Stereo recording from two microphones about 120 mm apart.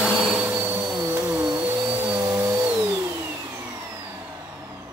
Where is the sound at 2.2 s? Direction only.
30° right (ahead or behind).